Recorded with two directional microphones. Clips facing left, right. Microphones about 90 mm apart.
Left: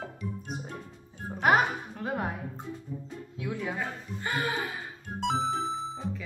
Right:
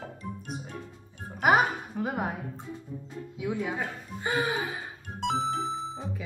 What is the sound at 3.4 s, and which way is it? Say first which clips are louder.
Speech: right 2 dB; 10° right (ahead or behind).